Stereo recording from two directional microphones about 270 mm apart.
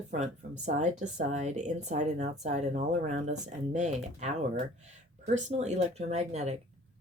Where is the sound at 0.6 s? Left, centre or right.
Right.